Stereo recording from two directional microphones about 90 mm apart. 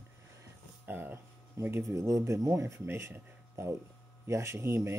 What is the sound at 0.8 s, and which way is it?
Speech, 20° right (ahead or behind).